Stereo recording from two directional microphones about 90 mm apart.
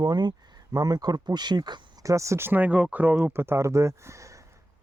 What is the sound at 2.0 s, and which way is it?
Speech, 35° right (ahead or behind).